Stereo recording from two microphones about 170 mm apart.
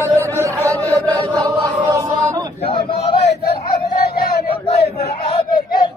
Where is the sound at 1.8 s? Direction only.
20° right (ahead or behind).